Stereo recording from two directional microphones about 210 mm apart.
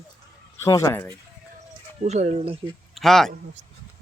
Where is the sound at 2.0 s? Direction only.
30° right (ahead or behind).